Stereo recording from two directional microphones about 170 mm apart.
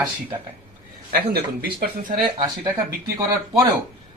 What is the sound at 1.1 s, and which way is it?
Speech, 65° right (ahead or behind).